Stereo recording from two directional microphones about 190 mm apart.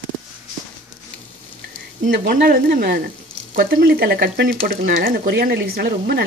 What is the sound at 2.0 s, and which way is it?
Speech, 55° right (ahead or behind).